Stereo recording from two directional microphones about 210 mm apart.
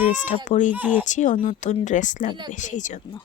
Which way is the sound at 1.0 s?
35° left (ahead or behind).